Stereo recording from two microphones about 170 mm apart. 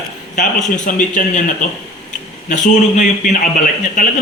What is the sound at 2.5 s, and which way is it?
A man's voice, 50° left (ahead or behind).